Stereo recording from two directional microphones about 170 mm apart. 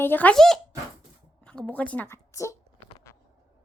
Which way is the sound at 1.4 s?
5° left (ahead or behind).